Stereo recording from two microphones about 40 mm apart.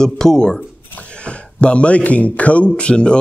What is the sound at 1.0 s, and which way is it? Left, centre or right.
Speech, left.